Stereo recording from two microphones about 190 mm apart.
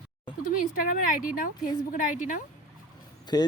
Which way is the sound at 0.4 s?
45° left (ahead or behind).